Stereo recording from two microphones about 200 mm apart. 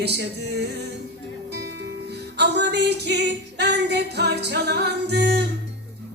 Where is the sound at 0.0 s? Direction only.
55° right (ahead or behind).